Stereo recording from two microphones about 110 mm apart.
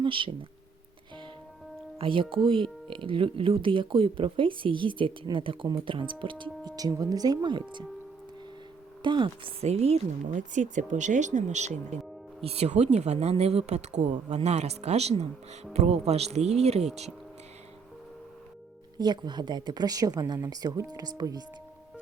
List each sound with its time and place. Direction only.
0.0 s speech: 50° right (ahead or behind)
2.0 s speech: 55° right (ahead or behind)
6.7 s speech: 35° right (ahead or behind)
9.0 s speech: 45° right (ahead or behind)
9.6 s speech: 70° right (ahead or behind)
10.8 s speech: 90° right
12.4 s speech: 65° right (ahead or behind)
18.9 s speech: 40° right (ahead or behind)